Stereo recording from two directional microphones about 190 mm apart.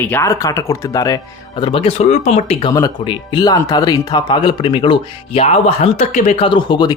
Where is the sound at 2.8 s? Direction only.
20° left (ahead or behind).